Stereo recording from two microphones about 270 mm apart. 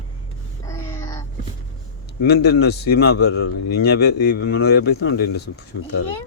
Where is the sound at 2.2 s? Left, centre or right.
Left.